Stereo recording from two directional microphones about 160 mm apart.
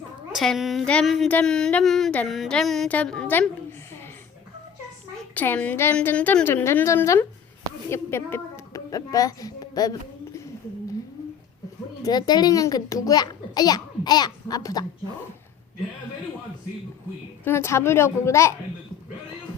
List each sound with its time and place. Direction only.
0.3 s speech: centre (ahead or behind)
5.3 s a woman's voice: 10° left (ahead or behind)
12.0 s a child's voice: 25° left (ahead or behind)
17.4 s a woman's voice: 15° left (ahead or behind)